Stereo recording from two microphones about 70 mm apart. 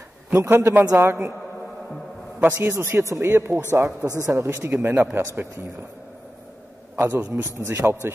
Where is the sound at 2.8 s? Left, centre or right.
Right.